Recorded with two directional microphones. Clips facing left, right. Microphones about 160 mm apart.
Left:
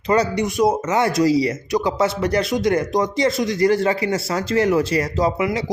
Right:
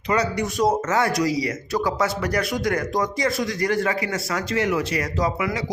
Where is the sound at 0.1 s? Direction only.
30° left (ahead or behind).